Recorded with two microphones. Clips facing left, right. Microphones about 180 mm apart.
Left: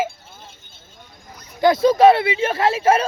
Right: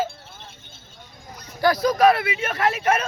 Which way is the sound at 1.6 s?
25° left (ahead or behind).